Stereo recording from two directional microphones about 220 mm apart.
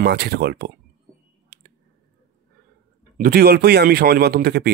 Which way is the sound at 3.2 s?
45° right (ahead or behind).